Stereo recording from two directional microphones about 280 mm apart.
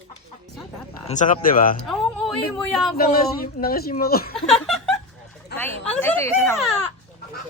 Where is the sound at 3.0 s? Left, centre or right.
Left.